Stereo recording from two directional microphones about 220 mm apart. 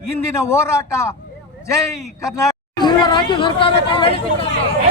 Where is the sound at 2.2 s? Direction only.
15° left (ahead or behind).